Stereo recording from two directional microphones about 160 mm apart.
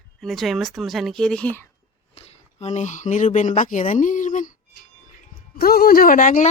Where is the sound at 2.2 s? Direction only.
40° left (ahead or behind).